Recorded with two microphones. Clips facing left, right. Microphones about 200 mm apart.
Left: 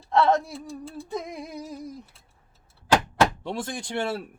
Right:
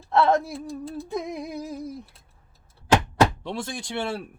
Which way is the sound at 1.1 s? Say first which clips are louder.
Right 2 dB; centre (ahead or behind).